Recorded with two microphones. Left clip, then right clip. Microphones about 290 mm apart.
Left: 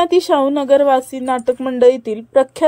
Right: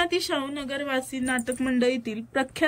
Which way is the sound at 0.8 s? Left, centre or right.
Left.